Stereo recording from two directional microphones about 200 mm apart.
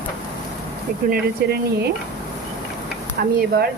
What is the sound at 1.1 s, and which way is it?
Speech, 55° right (ahead or behind).